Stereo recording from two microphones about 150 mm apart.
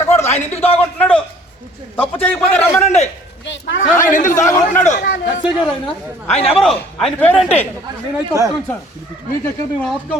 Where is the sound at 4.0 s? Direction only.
60° left (ahead or behind).